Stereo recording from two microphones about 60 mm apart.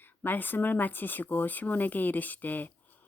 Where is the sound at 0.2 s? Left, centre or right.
Left.